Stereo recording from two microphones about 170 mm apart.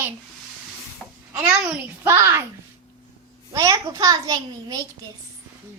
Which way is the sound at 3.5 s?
20° right (ahead or behind).